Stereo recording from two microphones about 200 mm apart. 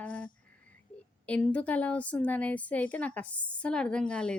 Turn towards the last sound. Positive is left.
turn(degrees=5)  # may be behind; listen again after turning